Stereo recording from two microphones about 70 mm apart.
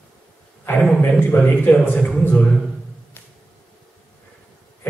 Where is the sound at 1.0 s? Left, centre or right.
Left.